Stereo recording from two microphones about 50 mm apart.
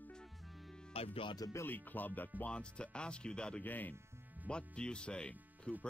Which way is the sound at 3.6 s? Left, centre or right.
Left.